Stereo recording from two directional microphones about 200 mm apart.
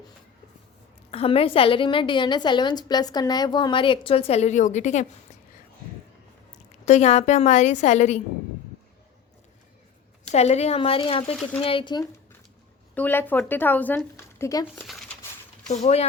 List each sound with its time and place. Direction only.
1.1 s a woman's voice: 30° left (ahead or behind)
6.8 s a woman's voice: 35° left (ahead or behind)
10.2 s a woman's voice: 30° left (ahead or behind)
12.9 s speech: 10° left (ahead or behind)
15.7 s a woman's voice: 30° left (ahead or behind)